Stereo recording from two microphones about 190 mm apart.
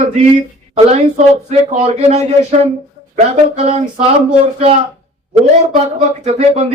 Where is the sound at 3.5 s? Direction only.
35° right (ahead or behind).